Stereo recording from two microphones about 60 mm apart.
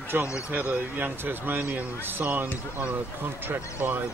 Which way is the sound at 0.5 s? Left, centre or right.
Right.